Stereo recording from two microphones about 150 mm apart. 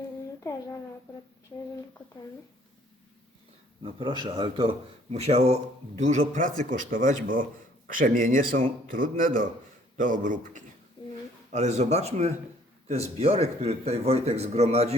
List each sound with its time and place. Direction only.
3.8 s speech: 35° right (ahead or behind)
5.1 s a man's voice: 45° right (ahead or behind)
11.0 s a sound: 35° left (ahead or behind)
11.5 s a man's voice: 50° right (ahead or behind)